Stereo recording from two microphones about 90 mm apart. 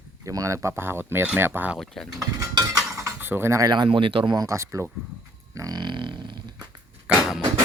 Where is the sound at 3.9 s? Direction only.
80° right.